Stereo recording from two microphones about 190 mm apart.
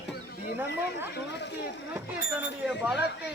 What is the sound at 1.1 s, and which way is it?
Speech, 65° left (ahead or behind).